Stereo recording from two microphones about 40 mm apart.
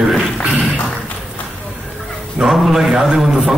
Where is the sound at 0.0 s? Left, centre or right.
Centre.